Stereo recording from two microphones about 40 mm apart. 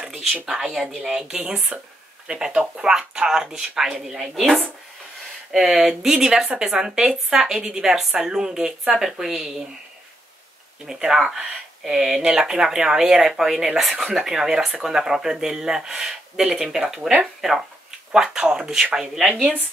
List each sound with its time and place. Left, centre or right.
0.1 s a sound: centre
0.5 s speech: centre
0.8 s speech: centre
1.7 s speech: right
2.2 s speech: right
4.4 s speech: centre
10.9 s speech: centre